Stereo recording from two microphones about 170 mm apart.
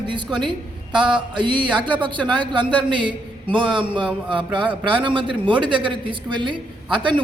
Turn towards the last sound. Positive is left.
turn(degrees=-30)  # may be behind; listen again after turning